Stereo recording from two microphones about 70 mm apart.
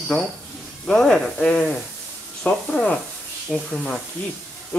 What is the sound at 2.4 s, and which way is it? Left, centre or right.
Speech, left.